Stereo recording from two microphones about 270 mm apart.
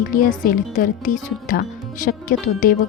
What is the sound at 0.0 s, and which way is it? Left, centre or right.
A woman's voice, left.